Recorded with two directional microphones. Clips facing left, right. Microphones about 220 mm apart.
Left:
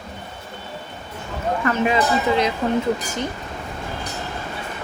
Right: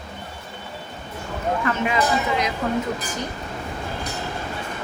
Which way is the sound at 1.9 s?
30° left (ahead or behind).